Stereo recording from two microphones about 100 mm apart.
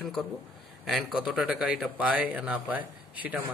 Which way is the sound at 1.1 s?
10° right (ahead or behind).